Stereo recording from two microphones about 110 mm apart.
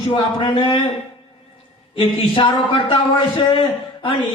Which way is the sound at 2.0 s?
50° left (ahead or behind).